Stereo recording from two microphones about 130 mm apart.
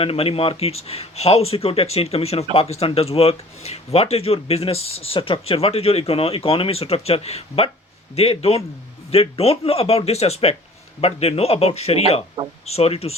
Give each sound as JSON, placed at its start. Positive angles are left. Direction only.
{"t": 0.0, "sound": "speech", "side_deg": 50}